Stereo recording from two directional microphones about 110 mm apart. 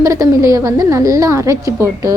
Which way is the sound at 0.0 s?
30° right (ahead or behind).